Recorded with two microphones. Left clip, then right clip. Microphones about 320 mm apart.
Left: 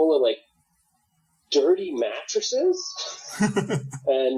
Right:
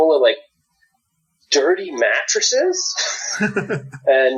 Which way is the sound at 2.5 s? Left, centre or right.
Right.